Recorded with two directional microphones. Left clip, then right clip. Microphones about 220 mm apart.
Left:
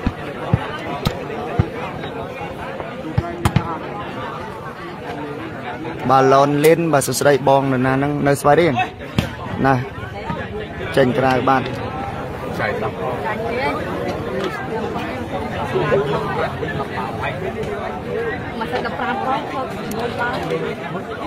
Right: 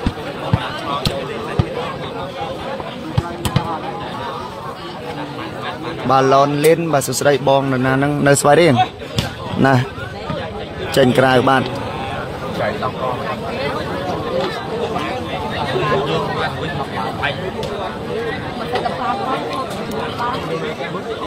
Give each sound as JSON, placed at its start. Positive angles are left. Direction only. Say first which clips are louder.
{"t": 6.0, "sound": "speech", "louder": "even", "side_deg": 0}
{"t": 9.1, "sound": "a sound", "louder": "right 2 dB", "side_deg": -15}
{"t": 11.0, "sound": "speech", "louder": "right 3 dB", "side_deg": -15}